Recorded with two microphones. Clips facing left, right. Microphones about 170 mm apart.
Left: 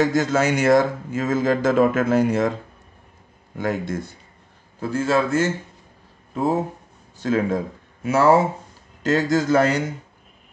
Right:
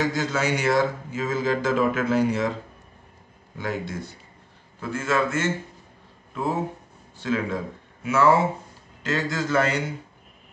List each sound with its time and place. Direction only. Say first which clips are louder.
0.1 s speech: left 5 dB; 45° left (ahead or behind)
3.5 s speech: left 5 dB; 50° left (ahead or behind)
4.7 s a man's voice: left 4 dB; 35° left (ahead or behind)